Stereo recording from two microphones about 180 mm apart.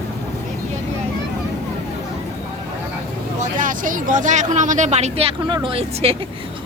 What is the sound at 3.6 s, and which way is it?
Speech, 50° right (ahead or behind).